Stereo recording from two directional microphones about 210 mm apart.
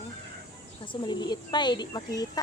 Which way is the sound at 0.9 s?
20° left (ahead or behind).